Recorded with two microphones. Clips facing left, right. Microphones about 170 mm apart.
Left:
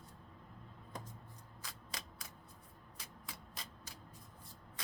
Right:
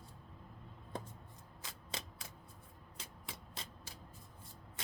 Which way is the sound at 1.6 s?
25° right (ahead or behind).